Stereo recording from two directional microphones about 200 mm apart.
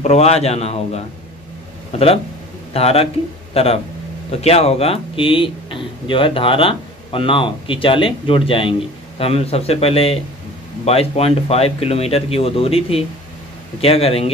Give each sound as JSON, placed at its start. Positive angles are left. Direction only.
{"t": 0.0, "sound": "a man's voice", "side_deg": 30}